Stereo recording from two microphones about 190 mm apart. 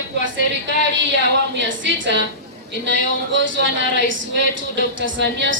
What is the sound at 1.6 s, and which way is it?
A woman's voice, 75° right (ahead or behind).